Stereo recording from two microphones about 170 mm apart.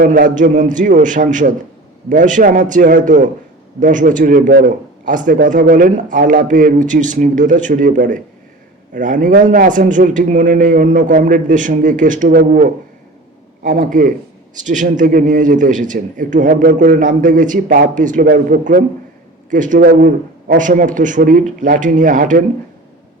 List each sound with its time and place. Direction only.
0.0 s a man's voice: 50° right (ahead or behind)
13.6 s a man's voice: 50° right (ahead or behind)